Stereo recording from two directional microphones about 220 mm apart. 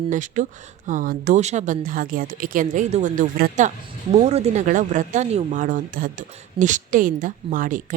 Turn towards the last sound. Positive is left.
turn(degrees=-35)  # may be behind; listen again after turning